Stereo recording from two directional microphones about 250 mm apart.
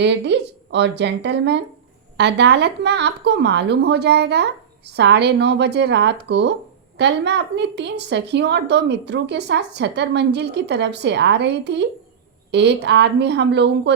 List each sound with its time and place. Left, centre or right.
0.0 s a woman's voice: right